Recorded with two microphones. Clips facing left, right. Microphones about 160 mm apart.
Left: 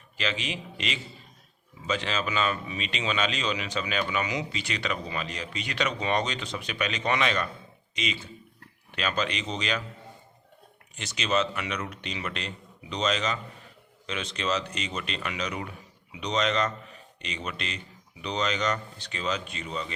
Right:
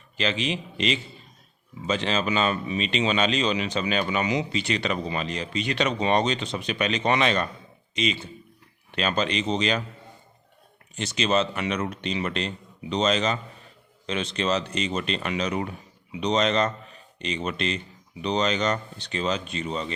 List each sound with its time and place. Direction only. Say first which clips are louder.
0.2 s speech: right 5 dB; 25° right (ahead or behind)
10.9 s speech: right 4 dB; 30° right (ahead or behind)